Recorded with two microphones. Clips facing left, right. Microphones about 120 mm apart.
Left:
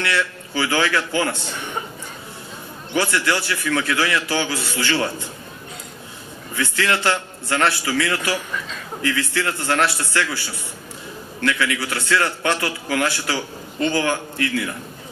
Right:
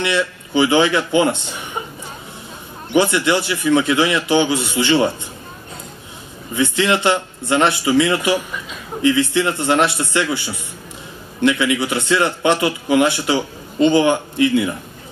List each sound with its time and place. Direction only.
0.0 s a man's voice: 20° right (ahead or behind)
2.9 s a man's voice: 20° right (ahead or behind)
6.5 s a man's voice: 20° right (ahead or behind)